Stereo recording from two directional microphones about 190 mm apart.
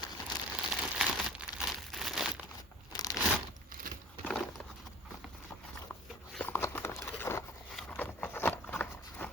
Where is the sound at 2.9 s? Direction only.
20° left (ahead or behind).